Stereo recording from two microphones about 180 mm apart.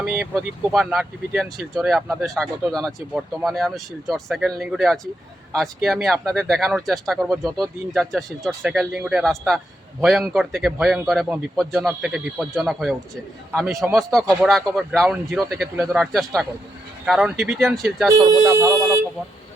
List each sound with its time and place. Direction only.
0.0 s speech: 5° right (ahead or behind)
18.4 s speech: 15° right (ahead or behind)